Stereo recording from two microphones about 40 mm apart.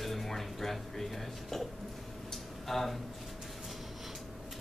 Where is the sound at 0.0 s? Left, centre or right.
Centre.